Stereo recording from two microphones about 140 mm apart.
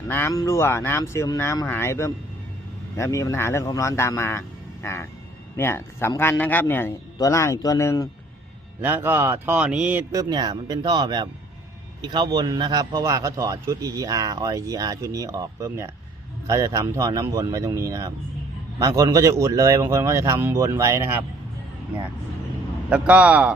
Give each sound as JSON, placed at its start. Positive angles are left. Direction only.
{"t": 0.1, "sound": "a man's voice", "side_deg": 20}
{"t": 8.8, "sound": "speech", "side_deg": -15}
{"t": 10.1, "sound": "a man's voice", "side_deg": -25}
{"t": 22.9, "sound": "speech", "side_deg": -10}